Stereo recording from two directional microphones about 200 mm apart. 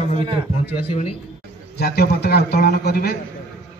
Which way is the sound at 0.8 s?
30° left (ahead or behind).